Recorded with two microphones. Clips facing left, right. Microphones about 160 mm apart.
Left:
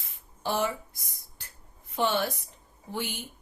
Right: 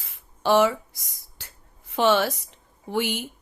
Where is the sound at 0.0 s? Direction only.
90° right.